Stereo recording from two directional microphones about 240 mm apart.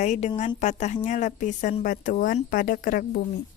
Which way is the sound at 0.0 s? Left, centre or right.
Left.